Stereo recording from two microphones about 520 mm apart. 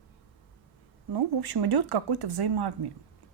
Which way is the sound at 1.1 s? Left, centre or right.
Right.